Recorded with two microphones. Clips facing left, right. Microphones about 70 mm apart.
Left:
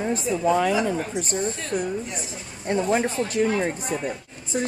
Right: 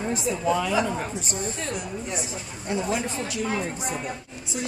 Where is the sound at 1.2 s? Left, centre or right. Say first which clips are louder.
Left 4 dB; left.